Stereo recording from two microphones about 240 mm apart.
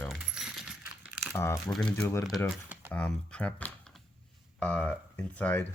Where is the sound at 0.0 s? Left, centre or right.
Centre.